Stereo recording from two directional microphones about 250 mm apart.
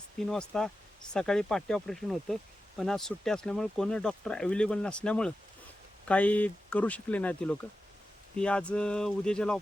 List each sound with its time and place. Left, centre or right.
0.2 s speech: centre